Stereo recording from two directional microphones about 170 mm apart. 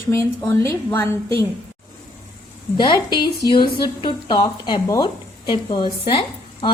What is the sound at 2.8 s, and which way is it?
Speech, 25° left (ahead or behind).